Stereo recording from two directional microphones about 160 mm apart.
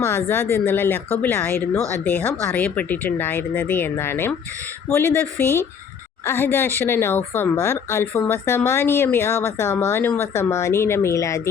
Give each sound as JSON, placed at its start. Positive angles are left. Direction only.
{"t": 0.0, "sound": "speech", "side_deg": 15}
{"t": 6.2, "sound": "speech", "side_deg": 15}